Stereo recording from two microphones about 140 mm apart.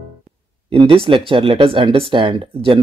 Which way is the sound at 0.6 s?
40° right (ahead or behind).